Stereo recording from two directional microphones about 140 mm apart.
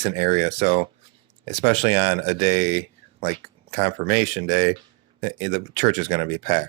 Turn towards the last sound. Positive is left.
turn(degrees=-55)  # may be behind; listen again after turning